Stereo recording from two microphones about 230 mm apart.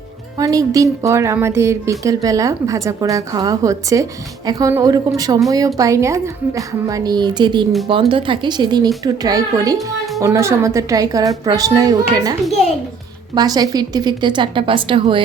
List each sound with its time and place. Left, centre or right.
0.3 s a woman's voice: centre